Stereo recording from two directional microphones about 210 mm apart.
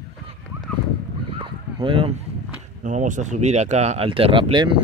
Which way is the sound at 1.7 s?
25° right (ahead or behind).